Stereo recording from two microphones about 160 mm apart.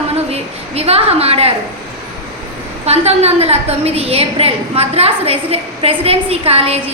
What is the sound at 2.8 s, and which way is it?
A woman's voice, 40° right (ahead or behind).